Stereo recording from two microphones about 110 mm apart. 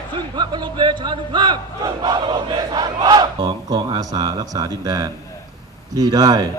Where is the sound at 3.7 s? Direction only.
35° right (ahead or behind).